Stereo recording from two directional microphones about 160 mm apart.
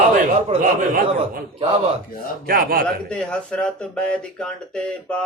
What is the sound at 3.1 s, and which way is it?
Speech, 5° left (ahead or behind).